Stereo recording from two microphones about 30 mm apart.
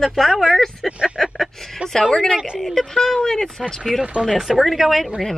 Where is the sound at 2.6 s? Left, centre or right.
Centre.